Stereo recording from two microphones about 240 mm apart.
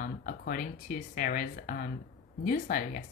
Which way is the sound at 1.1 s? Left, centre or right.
Left.